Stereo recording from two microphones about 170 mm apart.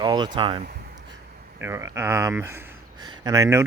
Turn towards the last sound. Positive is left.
turn(degrees=-20)  # may be behind; listen again after turning